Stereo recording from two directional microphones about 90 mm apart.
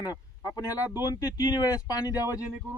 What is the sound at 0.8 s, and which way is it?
Speech, 20° right (ahead or behind).